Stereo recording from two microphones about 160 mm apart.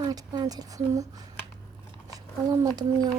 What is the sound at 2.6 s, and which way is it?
Speech, 25° right (ahead or behind).